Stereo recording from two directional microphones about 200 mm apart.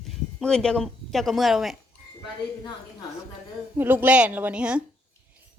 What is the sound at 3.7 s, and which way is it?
A woman's voice, 10° right (ahead or behind).